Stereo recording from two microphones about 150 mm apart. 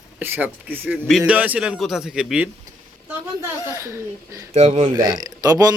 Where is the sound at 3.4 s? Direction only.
20° right (ahead or behind).